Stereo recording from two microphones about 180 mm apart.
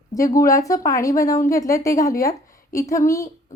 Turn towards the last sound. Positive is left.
turn(degrees=15)  # may be behind; listen again after turning